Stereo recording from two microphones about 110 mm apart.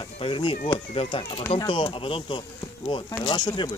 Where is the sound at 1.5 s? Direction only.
45° left (ahead or behind).